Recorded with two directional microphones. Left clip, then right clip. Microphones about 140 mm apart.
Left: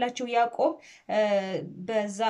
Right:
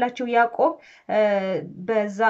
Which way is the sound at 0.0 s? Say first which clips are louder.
Right 5 dB; 20° left (ahead or behind).